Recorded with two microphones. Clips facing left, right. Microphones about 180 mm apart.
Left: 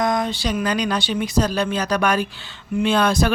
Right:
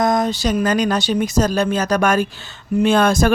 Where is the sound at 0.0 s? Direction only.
45° right (ahead or behind).